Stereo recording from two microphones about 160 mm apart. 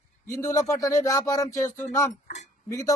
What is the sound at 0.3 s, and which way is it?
Speech, 20° left (ahead or behind).